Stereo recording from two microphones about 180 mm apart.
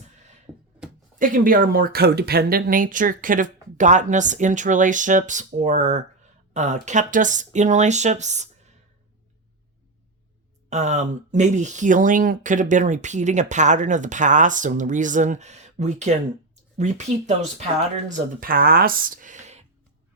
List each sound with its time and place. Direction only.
0.5 s a sound: 5° right (ahead or behind)
1.2 s speech: 50° right (ahead or behind)
10.7 s speech: 40° right (ahead or behind)